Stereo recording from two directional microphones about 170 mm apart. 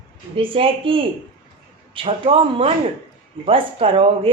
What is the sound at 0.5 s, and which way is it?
Speech, 30° right (ahead or behind).